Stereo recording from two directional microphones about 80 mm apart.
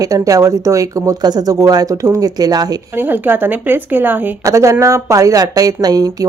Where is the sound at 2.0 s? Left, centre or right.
Right.